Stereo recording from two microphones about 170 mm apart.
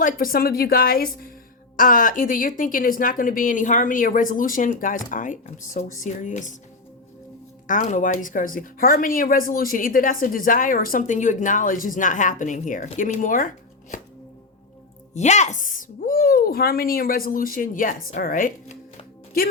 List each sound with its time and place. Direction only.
0.0 s a woman's voice: 55° left (ahead or behind)
7.7 s a woman's voice: 50° left (ahead or behind)
15.1 s speech: 45° left (ahead or behind)